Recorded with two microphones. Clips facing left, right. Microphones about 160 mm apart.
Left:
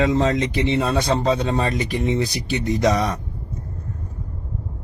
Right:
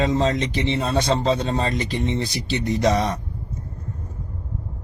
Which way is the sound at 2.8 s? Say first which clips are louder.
Left 1 dB; 20° right (ahead or behind).